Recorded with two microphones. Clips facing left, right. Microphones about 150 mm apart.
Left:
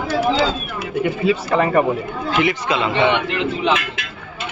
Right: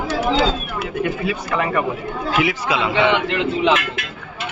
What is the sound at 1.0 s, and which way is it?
Speech, 20° left (ahead or behind).